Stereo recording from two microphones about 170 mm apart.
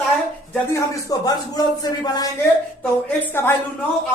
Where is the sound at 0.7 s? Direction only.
20° left (ahead or behind).